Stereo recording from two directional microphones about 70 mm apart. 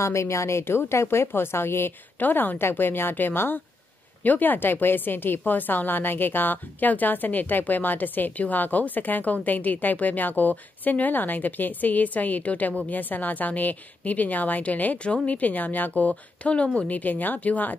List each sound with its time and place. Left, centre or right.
0.0 s a woman's voice: left